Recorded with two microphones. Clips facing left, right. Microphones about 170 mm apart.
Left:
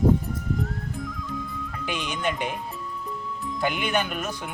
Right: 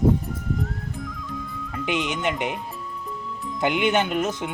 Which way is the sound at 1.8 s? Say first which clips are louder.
Right 3 dB; 20° right (ahead or behind).